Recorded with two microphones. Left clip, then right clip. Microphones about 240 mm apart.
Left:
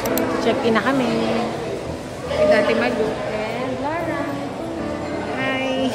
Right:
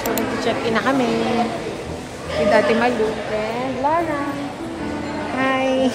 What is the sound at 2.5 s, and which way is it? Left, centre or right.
Speech, centre.